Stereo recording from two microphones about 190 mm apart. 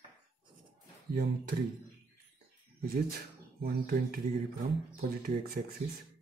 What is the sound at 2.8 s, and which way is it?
Speech, 50° right (ahead or behind).